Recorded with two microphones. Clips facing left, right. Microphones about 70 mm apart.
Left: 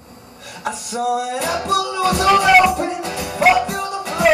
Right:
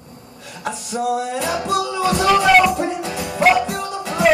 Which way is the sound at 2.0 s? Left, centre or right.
Centre.